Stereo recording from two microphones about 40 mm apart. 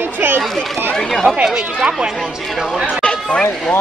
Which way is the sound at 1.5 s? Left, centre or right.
Right.